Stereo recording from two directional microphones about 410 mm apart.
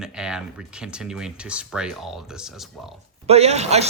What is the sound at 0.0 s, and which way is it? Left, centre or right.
Speech, centre.